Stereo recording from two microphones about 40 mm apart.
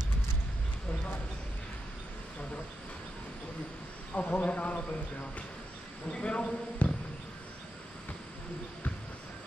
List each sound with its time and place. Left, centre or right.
4.1 s speech: left
6.1 s a man's voice: left
6.8 s insect: left